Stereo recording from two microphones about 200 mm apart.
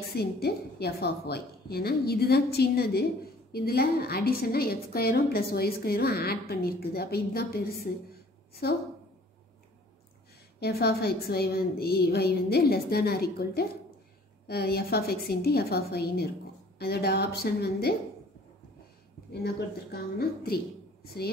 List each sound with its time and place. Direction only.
0.1 s a woman's voice: 50° left (ahead or behind)
10.6 s a woman's voice: 55° left (ahead or behind)
19.4 s a woman's voice: 50° left (ahead or behind)